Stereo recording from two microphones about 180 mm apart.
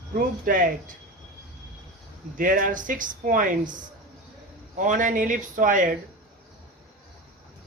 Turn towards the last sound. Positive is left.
turn(degrees=-45)  # may be behind; listen again after turning